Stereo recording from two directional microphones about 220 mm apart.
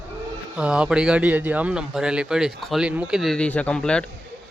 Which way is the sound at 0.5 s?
5° right (ahead or behind).